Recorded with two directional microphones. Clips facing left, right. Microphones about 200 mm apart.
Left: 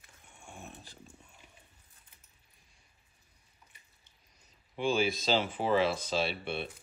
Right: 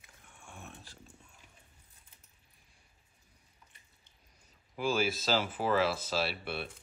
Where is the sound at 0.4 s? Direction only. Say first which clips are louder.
Left 2 dB; 30° left (ahead or behind).